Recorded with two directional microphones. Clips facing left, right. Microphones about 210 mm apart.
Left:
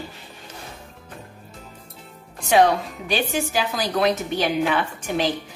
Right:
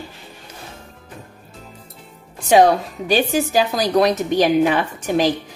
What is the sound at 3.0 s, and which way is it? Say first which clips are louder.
Speech: right 6 dB; 40° right (ahead or behind).